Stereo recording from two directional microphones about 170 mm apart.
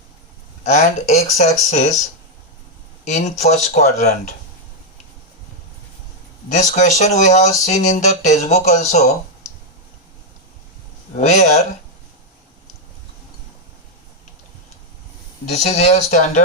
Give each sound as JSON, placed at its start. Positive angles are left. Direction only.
{"t": 0.6, "sound": "speech", "side_deg": 45}
{"t": 3.0, "sound": "speech", "side_deg": 45}
{"t": 6.5, "sound": "speech", "side_deg": 45}
{"t": 11.1, "sound": "speech", "side_deg": 45}
{"t": 15.5, "sound": "speech", "side_deg": 45}